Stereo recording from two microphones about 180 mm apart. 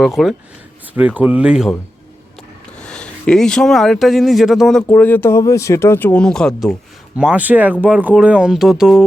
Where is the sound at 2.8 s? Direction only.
5° left (ahead or behind).